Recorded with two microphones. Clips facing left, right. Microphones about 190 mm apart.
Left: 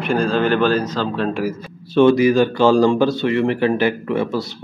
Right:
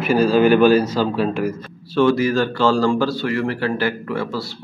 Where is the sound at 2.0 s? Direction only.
20° left (ahead or behind).